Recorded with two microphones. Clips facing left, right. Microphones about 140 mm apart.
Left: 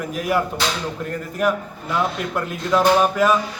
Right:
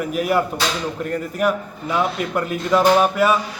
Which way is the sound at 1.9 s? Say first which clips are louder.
Right 2 dB; 10° right (ahead or behind).